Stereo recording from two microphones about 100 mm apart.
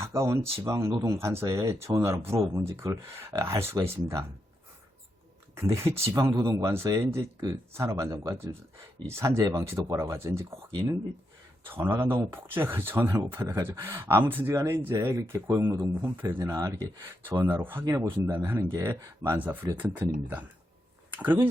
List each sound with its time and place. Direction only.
0.0 s speech: 25° right (ahead or behind)
5.5 s speech: 30° right (ahead or behind)
11.6 s speech: 20° right (ahead or behind)
16.4 s speech: 35° right (ahead or behind)
17.8 s speech: 30° right (ahead or behind)
21.1 s a sound: 20° right (ahead or behind)